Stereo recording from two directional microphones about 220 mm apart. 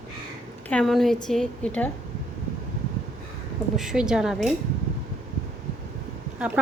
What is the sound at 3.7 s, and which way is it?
Speech, centre (ahead or behind).